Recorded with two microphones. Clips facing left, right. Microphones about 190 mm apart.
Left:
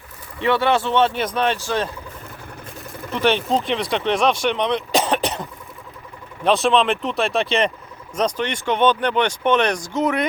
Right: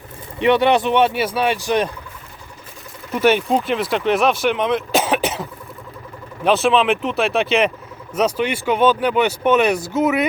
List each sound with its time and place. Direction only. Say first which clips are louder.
0.3 s speech: right 4 dB; 20° right (ahead or behind)
3.2 s speech: right 3 dB; 10° right (ahead or behind)